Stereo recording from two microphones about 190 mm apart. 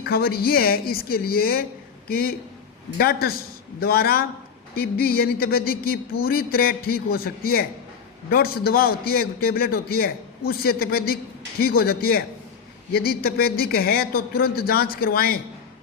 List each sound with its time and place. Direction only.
0.0 s a man's voice: 55° left (ahead or behind)